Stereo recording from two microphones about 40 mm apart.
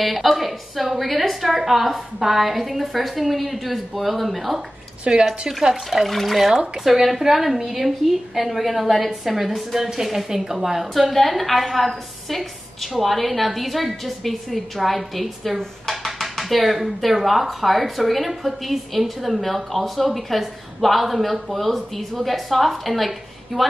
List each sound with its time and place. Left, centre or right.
0.0 s speech: centre
5.1 s speech: right
6.0 s speech: centre
6.5 s speech: centre
6.9 s speech: centre